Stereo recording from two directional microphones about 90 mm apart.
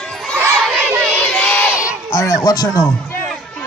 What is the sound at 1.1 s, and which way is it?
Crowd, 20° left (ahead or behind).